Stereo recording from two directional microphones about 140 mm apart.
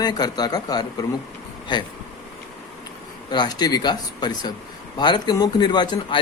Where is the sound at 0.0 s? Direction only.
30° left (ahead or behind).